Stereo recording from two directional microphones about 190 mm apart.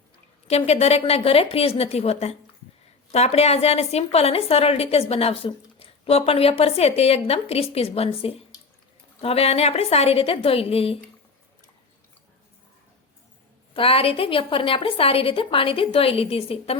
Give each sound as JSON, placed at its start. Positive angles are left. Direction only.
{"t": 0.4, "sound": "a woman's voice", "side_deg": 35}
{"t": 13.7, "sound": "a woman's voice", "side_deg": 30}